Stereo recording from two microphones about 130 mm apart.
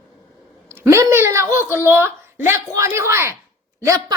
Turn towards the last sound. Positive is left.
turn(degrees=-30)  # may be behind; listen again after turning